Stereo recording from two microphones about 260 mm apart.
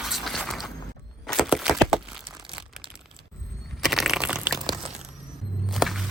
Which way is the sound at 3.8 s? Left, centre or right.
Centre.